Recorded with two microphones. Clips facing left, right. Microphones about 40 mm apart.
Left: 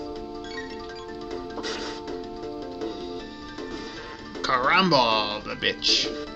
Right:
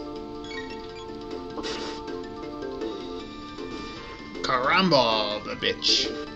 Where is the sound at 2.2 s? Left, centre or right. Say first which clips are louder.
Even; right.